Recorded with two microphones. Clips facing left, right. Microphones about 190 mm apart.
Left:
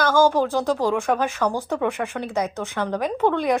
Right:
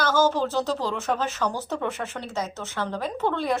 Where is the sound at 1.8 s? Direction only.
60° left (ahead or behind).